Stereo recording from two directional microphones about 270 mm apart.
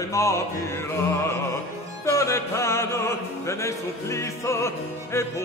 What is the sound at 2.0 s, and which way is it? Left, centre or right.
Music, centre.